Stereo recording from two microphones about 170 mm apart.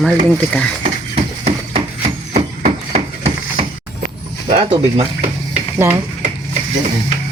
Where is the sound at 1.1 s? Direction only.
40° right (ahead or behind).